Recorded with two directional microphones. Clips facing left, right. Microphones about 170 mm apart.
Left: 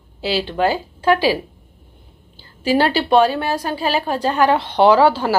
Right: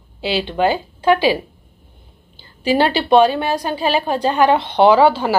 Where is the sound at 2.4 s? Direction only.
20° right (ahead or behind).